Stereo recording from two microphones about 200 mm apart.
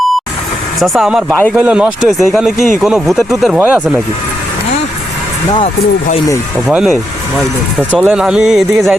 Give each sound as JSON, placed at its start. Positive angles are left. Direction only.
{"t": 0.8, "sound": "speech", "side_deg": -5}
{"t": 5.5, "sound": "speech", "side_deg": 25}
{"t": 6.7, "sound": "speech", "side_deg": 0}